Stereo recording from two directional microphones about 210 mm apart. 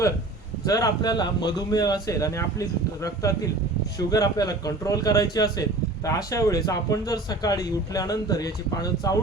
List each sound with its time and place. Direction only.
0.6 s a man's voice: 15° left (ahead or behind)